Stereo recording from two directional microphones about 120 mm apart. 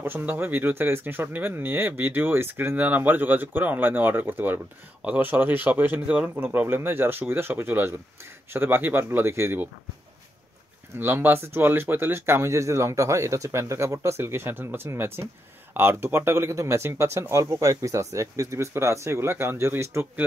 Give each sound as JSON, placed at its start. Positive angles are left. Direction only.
{"t": 0.0, "sound": "speech", "side_deg": -15}
{"t": 11.0, "sound": "speech", "side_deg": -20}